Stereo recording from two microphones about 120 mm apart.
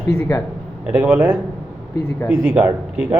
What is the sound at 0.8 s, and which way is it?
A man's voice, 10° right (ahead or behind).